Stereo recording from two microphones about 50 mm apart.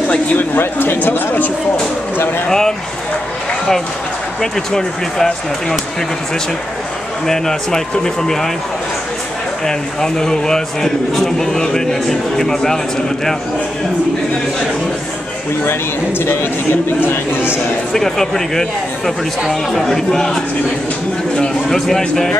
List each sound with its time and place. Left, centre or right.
0.1 s speech: left
0.6 s speech: left
2.4 s speech: centre
4.4 s speech: centre
7.2 s speech: centre
9.7 s speech: centre
17.0 s speech: left
17.9 s speech: centre
21.6 s speech: centre